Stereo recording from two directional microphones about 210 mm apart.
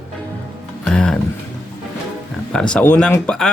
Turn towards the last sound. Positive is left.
turn(degrees=5)  # may be behind; listen again after turning